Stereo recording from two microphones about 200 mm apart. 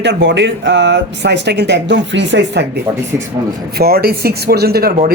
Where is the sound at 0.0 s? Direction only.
60° right (ahead or behind).